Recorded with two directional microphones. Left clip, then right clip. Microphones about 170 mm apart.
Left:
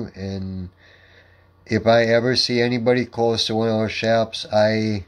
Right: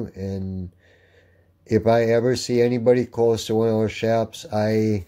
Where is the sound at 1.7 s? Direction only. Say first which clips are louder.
Left 2 dB; 35° right (ahead or behind).